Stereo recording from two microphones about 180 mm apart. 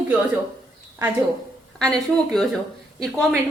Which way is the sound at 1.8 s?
5° left (ahead or behind).